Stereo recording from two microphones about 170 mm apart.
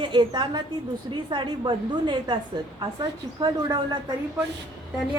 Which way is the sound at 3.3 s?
25° right (ahead or behind).